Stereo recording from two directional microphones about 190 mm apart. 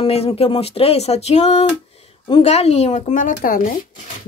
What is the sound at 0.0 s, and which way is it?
Speech, 30° left (ahead or behind).